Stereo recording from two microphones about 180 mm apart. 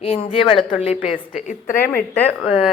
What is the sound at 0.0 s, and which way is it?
Speech, 30° left (ahead or behind).